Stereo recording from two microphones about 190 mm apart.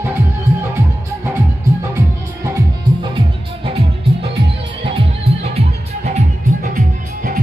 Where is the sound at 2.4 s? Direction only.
20° right (ahead or behind).